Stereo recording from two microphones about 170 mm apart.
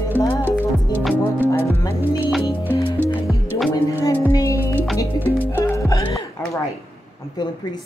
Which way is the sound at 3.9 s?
15° left (ahead or behind).